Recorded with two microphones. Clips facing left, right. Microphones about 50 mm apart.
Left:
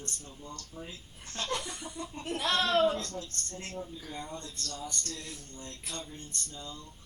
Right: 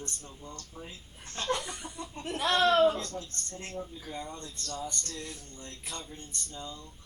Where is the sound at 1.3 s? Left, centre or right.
Right.